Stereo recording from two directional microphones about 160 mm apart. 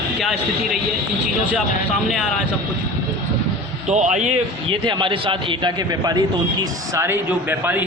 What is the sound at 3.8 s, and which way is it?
Speech, 45° right (ahead or behind).